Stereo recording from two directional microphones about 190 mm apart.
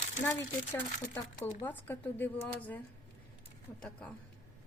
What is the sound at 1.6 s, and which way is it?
A woman's voice, 10° left (ahead or behind).